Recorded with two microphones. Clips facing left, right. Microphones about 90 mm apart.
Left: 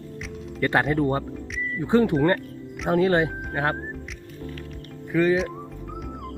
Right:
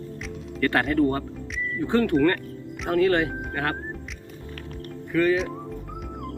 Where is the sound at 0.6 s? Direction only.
20° left (ahead or behind).